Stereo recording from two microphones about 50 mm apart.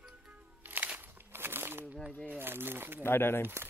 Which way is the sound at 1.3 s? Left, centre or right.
Right.